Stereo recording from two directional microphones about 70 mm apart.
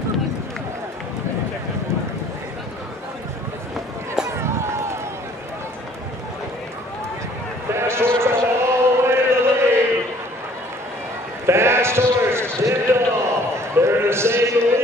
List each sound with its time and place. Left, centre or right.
4.4 s run: right
7.7 s chant: right
11.4 s sheep: right
12.5 s a sound: right